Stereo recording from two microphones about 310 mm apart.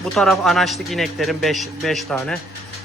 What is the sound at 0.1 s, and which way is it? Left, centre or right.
A man's voice, centre.